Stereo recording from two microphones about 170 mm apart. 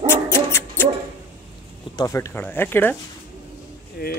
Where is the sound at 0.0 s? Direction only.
15° left (ahead or behind).